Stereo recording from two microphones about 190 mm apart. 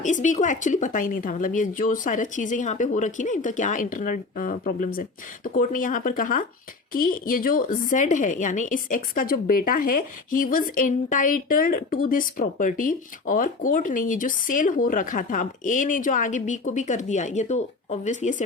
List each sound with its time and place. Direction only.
0.0 s a woman's voice: 40° left (ahead or behind)